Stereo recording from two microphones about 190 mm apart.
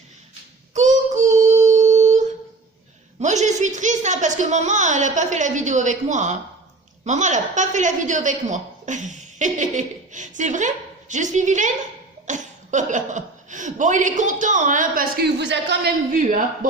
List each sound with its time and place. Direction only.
0.7 s child singing: 40° right (ahead or behind)
3.2 s a sound: 40° right (ahead or behind)
7.0 s a woman's voice: 40° right (ahead or behind); by 15.9 s 65° right (ahead or behind)